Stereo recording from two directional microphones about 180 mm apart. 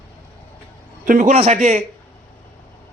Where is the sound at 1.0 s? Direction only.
45° right (ahead or behind).